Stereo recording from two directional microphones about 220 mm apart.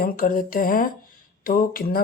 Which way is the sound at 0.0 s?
40° left (ahead or behind).